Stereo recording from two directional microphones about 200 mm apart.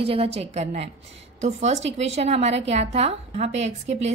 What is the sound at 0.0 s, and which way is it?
A woman's voice, 30° right (ahead or behind).